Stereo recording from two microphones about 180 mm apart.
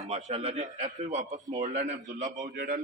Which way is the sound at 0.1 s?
35° right (ahead or behind).